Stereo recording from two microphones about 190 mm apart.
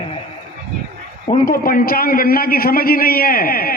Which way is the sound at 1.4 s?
50° left (ahead or behind).